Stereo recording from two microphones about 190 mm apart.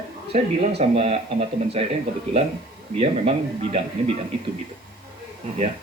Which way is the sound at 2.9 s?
30° right (ahead or behind).